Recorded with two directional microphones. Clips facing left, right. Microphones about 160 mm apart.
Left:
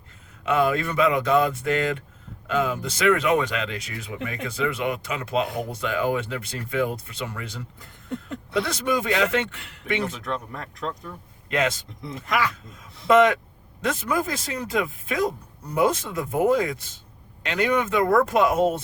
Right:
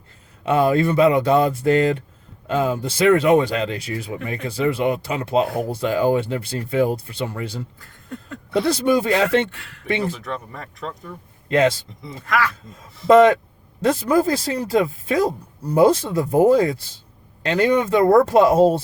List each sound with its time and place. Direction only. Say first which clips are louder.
0.4 s speech: right 5 dB; 30° right (ahead or behind)
7.8 s speech: left 2 dB; 20° left (ahead or behind)
8.5 s speech: right 6 dB; 30° right (ahead or behind)
10.2 s speech: even; centre (ahead or behind)
11.4 s speech: right 7 dB; 30° right (ahead or behind)
12.2 s speech: right 3 dB; 20° left (ahead or behind)
13.1 s speech: right 5 dB; 35° right (ahead or behind)